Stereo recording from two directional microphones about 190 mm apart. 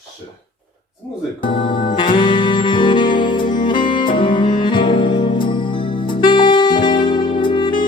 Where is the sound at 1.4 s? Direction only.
25° left (ahead or behind).